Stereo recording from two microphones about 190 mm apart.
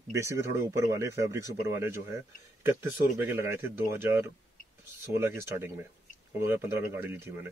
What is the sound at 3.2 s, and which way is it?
Speech, 10° right (ahead or behind).